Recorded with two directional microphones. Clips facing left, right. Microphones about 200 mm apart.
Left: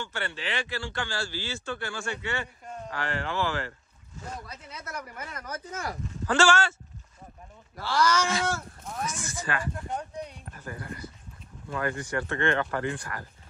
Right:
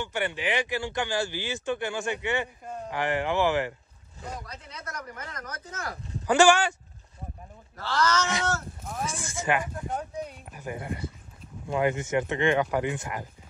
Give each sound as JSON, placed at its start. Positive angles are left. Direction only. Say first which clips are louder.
{"t": 0.0, "sound": "speech", "louder": "right 5 dB", "side_deg": -15}
{"t": 4.5, "sound": "speech", "louder": "even", "side_deg": 10}
{"t": 6.2, "sound": "speech", "louder": "right 4 dB", "side_deg": -15}
{"t": 7.7, "sound": "speech", "louder": "left 1 dB", "side_deg": 10}
{"t": 9.0, "sound": "speech", "louder": "right 4 dB", "side_deg": -30}
{"t": 9.8, "sound": "speech", "louder": "right 2 dB", "side_deg": -5}